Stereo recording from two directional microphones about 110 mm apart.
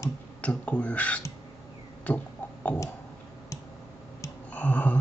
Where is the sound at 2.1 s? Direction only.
15° left (ahead or behind).